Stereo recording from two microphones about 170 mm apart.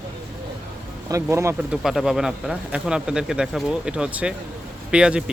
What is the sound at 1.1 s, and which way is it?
Speech, 15° right (ahead or behind).